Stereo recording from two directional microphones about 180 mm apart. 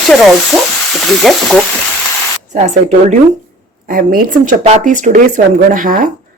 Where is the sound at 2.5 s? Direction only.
40° right (ahead or behind).